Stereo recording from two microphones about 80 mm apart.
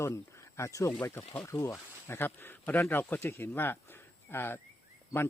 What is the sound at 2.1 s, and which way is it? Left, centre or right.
A man's voice, left.